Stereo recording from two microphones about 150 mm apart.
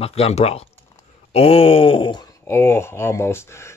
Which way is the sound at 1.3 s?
40° left (ahead or behind).